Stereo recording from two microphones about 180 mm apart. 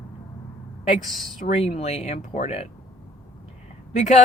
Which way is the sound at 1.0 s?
Centre (ahead or behind).